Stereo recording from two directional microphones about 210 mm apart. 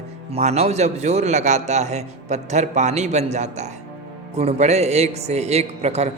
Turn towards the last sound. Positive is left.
turn(degrees=-30)  # may be behind; listen again after turning